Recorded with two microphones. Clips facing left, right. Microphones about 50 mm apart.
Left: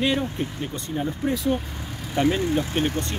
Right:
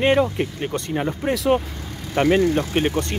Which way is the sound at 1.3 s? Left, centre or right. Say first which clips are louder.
Right 9 dB; right.